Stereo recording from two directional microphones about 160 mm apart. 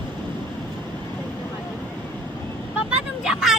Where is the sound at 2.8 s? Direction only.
5° right (ahead or behind).